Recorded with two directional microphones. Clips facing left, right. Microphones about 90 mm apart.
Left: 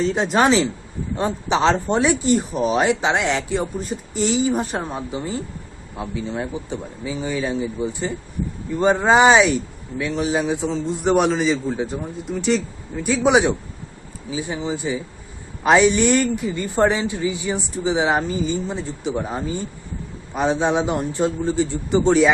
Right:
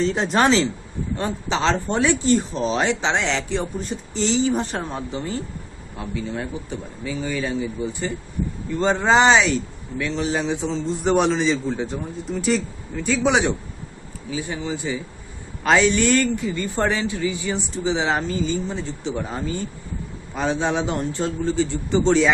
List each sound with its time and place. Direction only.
0.0 s speech: 5° left (ahead or behind)
1.1 s speech: 20° left (ahead or behind); by 12.6 s centre (ahead or behind)
12.9 s speech: 15° left (ahead or behind)